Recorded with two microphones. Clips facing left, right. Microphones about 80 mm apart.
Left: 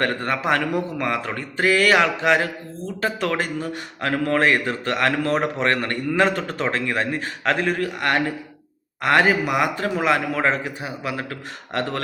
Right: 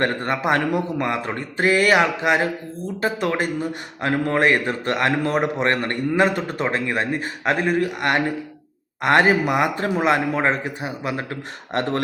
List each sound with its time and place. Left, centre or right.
0.0 s a man's voice: right